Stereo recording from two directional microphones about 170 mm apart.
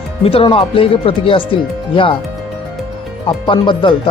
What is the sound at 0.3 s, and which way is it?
Speech, 35° left (ahead or behind).